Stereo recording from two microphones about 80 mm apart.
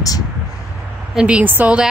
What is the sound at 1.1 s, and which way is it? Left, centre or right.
Speech, centre.